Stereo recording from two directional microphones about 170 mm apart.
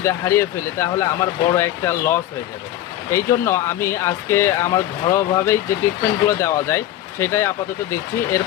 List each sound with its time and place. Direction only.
0.0 s speech: 15° left (ahead or behind)